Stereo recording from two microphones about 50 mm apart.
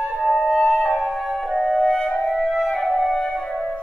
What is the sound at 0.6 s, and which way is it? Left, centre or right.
Music, centre.